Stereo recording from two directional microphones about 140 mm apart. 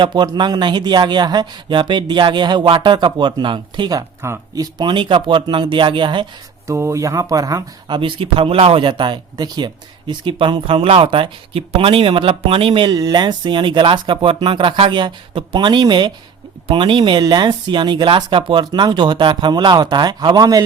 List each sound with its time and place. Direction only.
0.0 s speech: 35° right (ahead or behind)
6.7 s speech: 20° right (ahead or behind)